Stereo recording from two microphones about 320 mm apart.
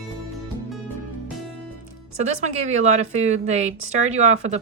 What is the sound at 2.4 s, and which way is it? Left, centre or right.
Speech, right.